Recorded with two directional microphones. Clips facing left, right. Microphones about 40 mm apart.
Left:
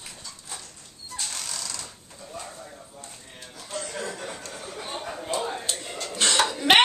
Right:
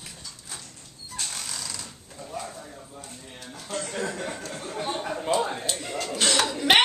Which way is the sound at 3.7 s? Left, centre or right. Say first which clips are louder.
Right 2 dB; right.